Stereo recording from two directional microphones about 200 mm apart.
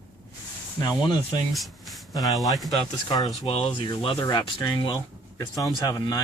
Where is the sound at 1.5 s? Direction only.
Centre (ahead or behind).